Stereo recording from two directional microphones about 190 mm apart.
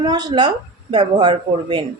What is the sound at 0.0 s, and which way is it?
A woman's voice, 20° right (ahead or behind).